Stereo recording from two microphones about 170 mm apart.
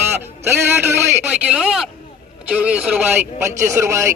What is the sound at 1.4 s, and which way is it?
Speech, 5° right (ahead or behind).